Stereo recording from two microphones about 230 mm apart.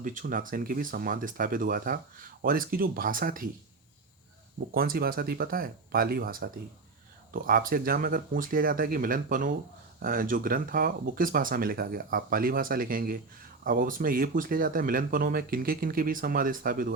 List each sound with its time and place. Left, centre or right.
0.0 s speech: right
4.7 s speech: right